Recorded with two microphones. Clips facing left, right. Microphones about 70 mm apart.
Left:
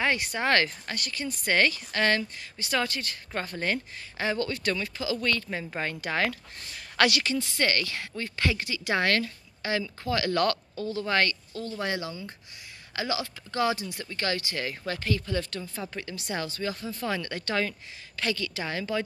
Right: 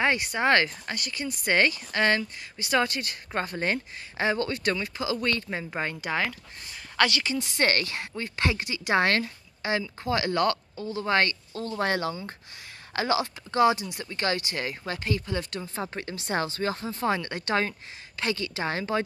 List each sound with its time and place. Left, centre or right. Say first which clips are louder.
0.0 s speech: right 3 dB; centre
7.3 s speech: even; centre
7.6 s speech: right 3 dB; right
7.9 s a woman's voice: right 1 dB; right
11.0 s a woman's voice: right 2 dB; right
11.7 s a woman's voice: right 5 dB; right; by 15.7 s centre
15.7 s speech: right 3 dB; right